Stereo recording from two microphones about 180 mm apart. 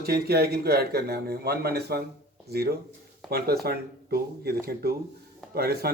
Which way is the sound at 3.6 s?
60° right (ahead or behind).